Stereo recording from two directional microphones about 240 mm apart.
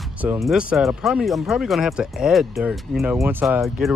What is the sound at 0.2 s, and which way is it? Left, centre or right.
Speech, centre.